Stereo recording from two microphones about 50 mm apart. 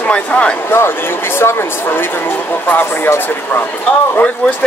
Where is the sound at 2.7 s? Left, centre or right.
Left.